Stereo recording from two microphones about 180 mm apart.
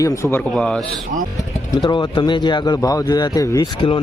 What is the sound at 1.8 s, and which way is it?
A man's voice, 25° left (ahead or behind).